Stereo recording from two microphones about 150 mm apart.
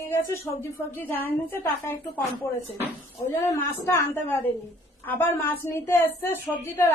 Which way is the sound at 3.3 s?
20° left (ahead or behind).